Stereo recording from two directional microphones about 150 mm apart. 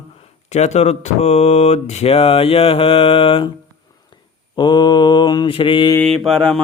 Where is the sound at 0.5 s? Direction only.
50° left (ahead or behind).